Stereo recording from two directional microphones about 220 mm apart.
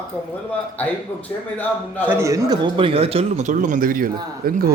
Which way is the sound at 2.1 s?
15° right (ahead or behind).